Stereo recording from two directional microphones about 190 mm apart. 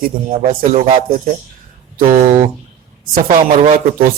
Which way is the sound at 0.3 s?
35° right (ahead or behind).